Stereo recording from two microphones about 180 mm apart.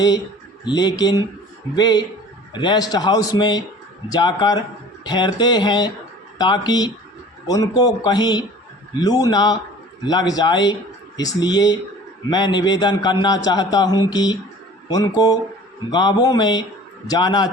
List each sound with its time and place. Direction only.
0.6 s a man's voice: 20° left (ahead or behind)